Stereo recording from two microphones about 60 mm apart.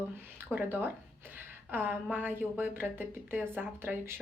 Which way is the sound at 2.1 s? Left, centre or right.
Right.